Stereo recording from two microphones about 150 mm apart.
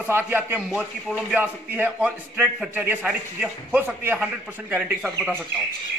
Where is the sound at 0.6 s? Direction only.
Centre (ahead or behind).